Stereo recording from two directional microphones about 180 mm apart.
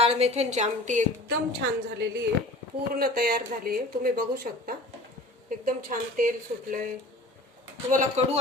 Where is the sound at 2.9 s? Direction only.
60° right (ahead or behind).